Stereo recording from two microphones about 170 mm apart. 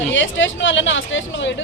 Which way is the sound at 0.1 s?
90° left.